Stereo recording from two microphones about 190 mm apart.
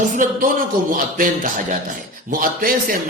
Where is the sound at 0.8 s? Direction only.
45° right (ahead or behind).